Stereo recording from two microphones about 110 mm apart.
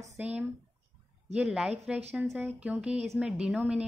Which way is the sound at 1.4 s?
10° right (ahead or behind).